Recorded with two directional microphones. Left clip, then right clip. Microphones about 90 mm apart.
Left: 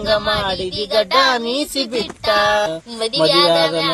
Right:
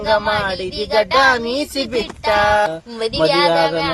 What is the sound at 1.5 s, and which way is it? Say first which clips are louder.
Speech: even; centre (ahead or behind).